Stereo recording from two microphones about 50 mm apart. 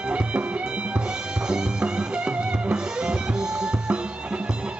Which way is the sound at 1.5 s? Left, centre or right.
Centre.